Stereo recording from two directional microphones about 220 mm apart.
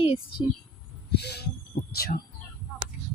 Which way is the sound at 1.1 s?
50° left (ahead or behind).